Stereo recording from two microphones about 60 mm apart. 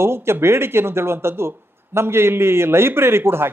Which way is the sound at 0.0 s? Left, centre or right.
Right.